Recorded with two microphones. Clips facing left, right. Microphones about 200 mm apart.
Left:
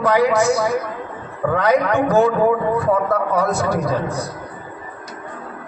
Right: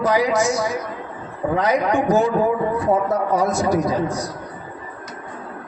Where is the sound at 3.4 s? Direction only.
60° left (ahead or behind).